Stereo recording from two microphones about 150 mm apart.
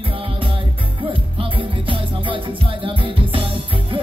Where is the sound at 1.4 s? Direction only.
35° right (ahead or behind).